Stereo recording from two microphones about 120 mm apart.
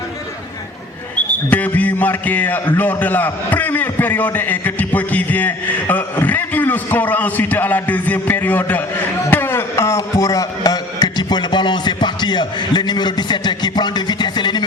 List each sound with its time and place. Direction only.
1.1 s a man's voice: 15° left (ahead or behind); by 14.6 s 35° left (ahead or behind)